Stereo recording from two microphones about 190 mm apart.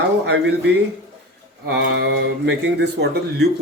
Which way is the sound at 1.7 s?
60° right (ahead or behind).